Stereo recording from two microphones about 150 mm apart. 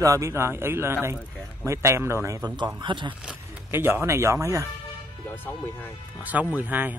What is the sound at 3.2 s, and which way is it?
Speech, 10° right (ahead or behind).